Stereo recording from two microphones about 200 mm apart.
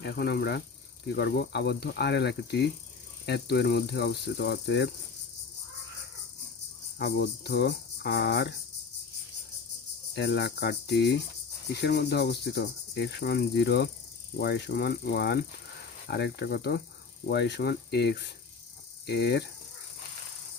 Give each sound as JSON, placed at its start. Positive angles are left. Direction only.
{"t": 0.0, "sound": "cricket", "side_deg": 55}
{"t": 7.0, "sound": "cricket", "side_deg": 55}
{"t": 10.2, "sound": "cricket", "side_deg": 55}